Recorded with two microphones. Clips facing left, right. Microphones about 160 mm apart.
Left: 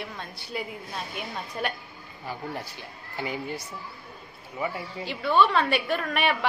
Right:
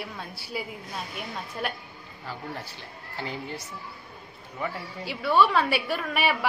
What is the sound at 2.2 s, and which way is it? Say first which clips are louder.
A woman's voice: left 2 dB; 15° left (ahead or behind).